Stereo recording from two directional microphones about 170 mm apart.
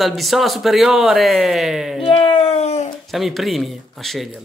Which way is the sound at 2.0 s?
30° left (ahead or behind).